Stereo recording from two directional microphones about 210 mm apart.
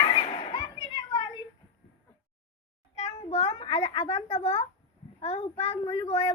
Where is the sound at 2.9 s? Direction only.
30° left (ahead or behind).